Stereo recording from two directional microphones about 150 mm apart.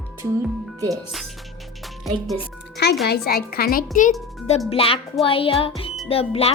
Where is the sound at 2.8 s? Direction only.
90° left.